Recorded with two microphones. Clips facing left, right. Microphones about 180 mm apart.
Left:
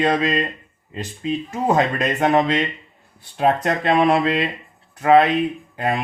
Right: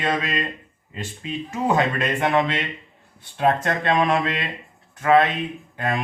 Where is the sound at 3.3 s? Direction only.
15° left (ahead or behind).